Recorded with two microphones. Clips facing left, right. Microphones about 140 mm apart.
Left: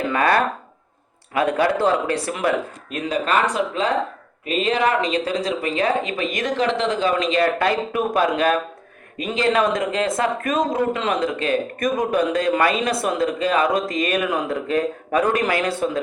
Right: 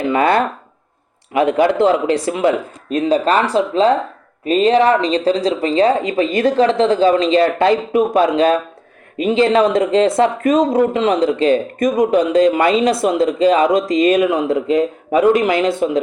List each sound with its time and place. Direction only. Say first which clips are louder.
0.1 s speech: right 5 dB; 25° right (ahead or behind)
2.9 s speech: right 7 dB; 35° right (ahead or behind); by 16.0 s 15° right (ahead or behind)